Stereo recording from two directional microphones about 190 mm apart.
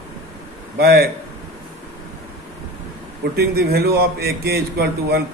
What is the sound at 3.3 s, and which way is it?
A man's voice, 55° right (ahead or behind).